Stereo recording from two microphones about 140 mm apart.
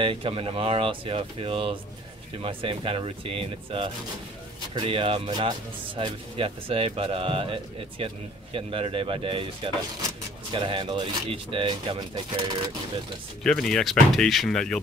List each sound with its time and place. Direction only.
0.0 s speech: 40° right (ahead or behind)
13.4 s speech: 5° left (ahead or behind)